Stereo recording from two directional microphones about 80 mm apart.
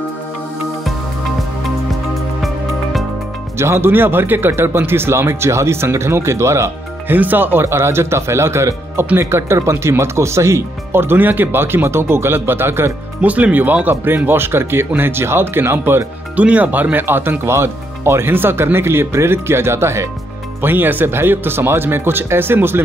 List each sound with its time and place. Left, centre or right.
2.4 s music: centre
3.5 s speech: right
7.2 s speech: right
13.2 s speech: centre